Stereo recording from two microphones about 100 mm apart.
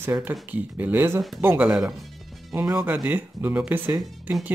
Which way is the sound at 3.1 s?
20° right (ahead or behind).